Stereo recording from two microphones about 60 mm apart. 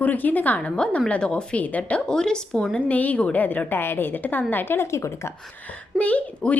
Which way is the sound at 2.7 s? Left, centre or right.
Left.